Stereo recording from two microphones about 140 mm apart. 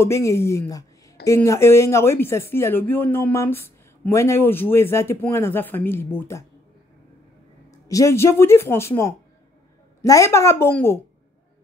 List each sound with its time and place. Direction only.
0.0 s speech: 20° left (ahead or behind)
7.9 s speech: 20° left (ahead or behind)